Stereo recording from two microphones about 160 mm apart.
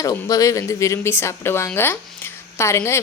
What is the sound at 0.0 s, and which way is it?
Speech, 20° left (ahead or behind).